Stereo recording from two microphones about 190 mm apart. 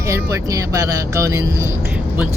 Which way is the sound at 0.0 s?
15° right (ahead or behind).